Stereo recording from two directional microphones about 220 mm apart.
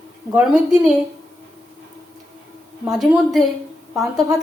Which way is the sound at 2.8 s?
Centre (ahead or behind).